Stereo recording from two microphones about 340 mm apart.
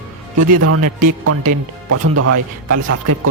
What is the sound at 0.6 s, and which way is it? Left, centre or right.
Speech, right.